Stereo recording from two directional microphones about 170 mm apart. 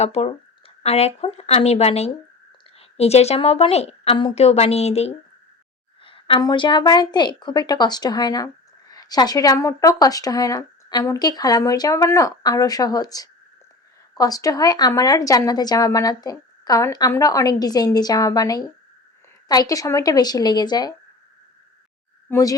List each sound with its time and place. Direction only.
0.0 s a woman's voice: 40° left (ahead or behind)
22.3 s speech: 20° left (ahead or behind)